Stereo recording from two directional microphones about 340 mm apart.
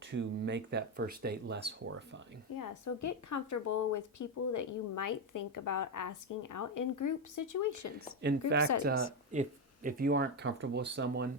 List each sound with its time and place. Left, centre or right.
0.1 s speech: right
2.6 s speech: left
8.2 s speech: right